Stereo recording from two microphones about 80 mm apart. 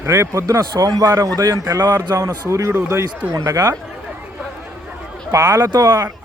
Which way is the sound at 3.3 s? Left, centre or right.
Right.